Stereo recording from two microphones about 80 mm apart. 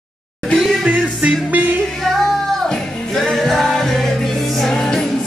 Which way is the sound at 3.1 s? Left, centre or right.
Centre.